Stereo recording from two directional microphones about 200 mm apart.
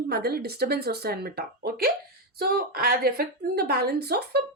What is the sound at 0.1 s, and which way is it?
A woman's voice, 50° right (ahead or behind).